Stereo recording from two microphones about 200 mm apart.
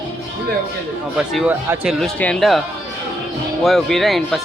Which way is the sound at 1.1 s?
Centre (ahead or behind).